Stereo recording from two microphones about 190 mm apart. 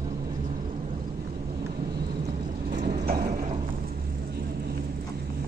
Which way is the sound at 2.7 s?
45° right (ahead or behind).